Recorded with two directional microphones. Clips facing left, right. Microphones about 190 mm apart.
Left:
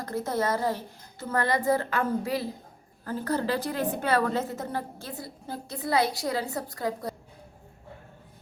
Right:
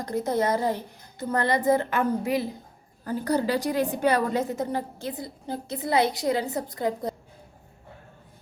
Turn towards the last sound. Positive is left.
turn(degrees=-20)  # may be behind; listen again after turning